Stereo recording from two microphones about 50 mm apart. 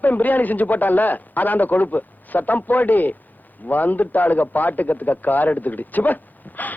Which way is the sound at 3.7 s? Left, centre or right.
Left.